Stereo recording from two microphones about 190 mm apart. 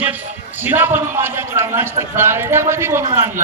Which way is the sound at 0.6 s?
10° right (ahead or behind).